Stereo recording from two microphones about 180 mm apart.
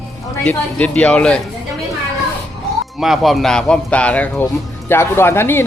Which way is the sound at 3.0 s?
Centre (ahead or behind).